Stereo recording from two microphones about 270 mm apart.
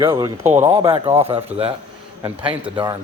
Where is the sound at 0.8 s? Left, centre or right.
Right.